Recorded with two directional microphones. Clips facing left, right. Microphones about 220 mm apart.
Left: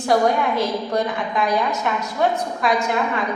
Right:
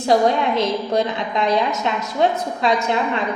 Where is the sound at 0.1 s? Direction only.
20° right (ahead or behind).